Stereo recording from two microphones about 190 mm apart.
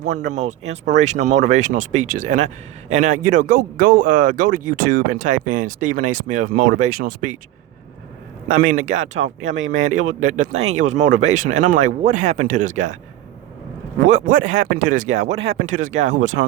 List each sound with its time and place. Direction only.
0.0 s speech: 40° right (ahead or behind)
9.0 s speech: 85° right
9.9 s speech: 45° right (ahead or behind)
14.0 s speech: 40° right (ahead or behind)